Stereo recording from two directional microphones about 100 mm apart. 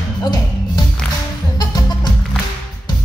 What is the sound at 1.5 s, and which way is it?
Music, 45° left (ahead or behind).